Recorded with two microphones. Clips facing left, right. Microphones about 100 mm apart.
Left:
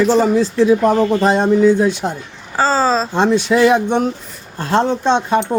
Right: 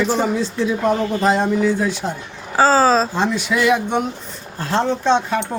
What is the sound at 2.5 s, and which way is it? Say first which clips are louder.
Speech: right 1 dB; 5° right (ahead or behind).